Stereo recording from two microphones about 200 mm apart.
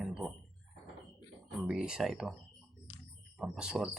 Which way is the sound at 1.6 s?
5° right (ahead or behind).